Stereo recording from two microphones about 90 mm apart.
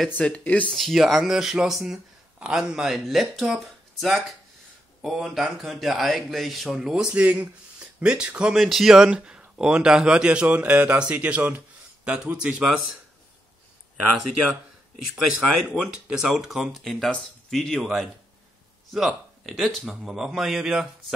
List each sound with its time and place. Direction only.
0.1 s speech: 15° left (ahead or behind)
0.7 s speech: centre (ahead or behind)
15.2 s speech: 5° right (ahead or behind)